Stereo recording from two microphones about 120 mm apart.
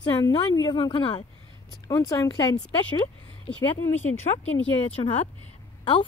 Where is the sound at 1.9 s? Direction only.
30° left (ahead or behind).